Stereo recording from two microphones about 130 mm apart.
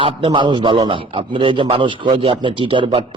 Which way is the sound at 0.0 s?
40° right (ahead or behind).